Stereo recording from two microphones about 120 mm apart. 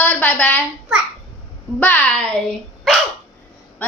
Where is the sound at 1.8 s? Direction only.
15° left (ahead or behind).